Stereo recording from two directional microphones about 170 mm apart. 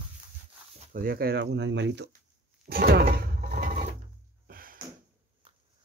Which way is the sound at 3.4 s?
45° right (ahead or behind).